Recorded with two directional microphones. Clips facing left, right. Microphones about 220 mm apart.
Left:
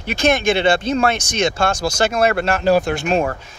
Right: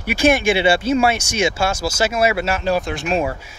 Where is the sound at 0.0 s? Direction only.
10° right (ahead or behind).